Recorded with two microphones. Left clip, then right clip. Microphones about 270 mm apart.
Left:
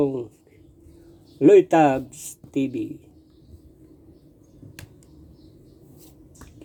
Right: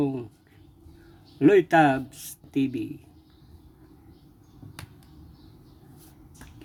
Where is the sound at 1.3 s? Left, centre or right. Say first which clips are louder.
Left 4 dB; right.